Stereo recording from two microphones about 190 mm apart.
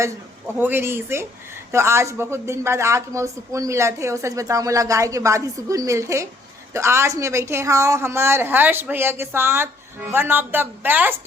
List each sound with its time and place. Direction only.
0.6 s speech: 10° right (ahead or behind)